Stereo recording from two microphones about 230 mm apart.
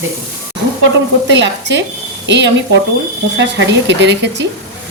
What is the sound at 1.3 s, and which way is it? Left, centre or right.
Speech, right.